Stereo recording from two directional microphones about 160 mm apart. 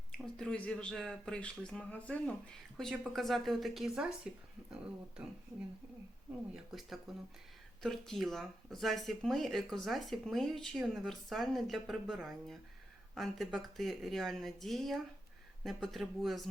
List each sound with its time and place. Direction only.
0.3 s speech: 5° left (ahead or behind)
6.5 s speech: centre (ahead or behind)